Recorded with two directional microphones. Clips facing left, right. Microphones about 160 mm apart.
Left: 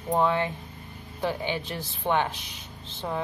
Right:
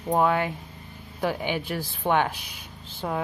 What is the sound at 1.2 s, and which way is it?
Speech, 10° right (ahead or behind).